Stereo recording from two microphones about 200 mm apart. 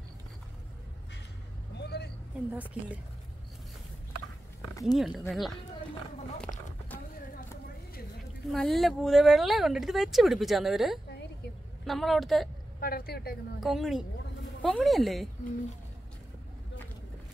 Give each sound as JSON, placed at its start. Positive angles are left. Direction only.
{"t": 1.8, "sound": "vehicle", "side_deg": 55}
{"t": 2.5, "sound": "speech", "side_deg": -5}
{"t": 4.9, "sound": "speech", "side_deg": 0}
{"t": 8.5, "sound": "speech", "side_deg": 0}
{"t": 12.8, "sound": "a woman's voice", "side_deg": 50}
{"t": 13.6, "sound": "speech", "side_deg": 0}